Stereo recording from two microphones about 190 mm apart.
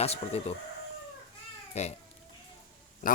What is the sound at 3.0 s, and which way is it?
Speech, 45° left (ahead or behind).